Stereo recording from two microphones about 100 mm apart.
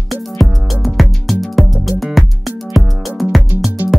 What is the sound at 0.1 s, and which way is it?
Music, centre (ahead or behind).